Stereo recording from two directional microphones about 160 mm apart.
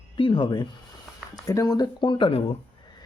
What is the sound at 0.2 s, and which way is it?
Speech, 30° left (ahead or behind).